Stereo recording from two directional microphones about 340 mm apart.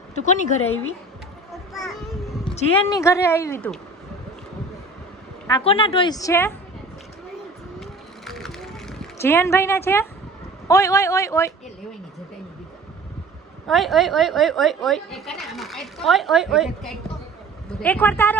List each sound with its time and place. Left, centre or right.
0.1 s a woman's voice: left
2.4 s speech: centre
5.5 s speech: centre
7.8 s vehicle: centre
10.7 s speech: centre
13.7 s a woman's voice: centre
17.8 s a woman's voice: centre